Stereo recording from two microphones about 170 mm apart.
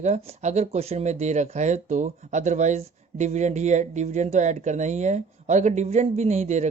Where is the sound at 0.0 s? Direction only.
40° right (ahead or behind).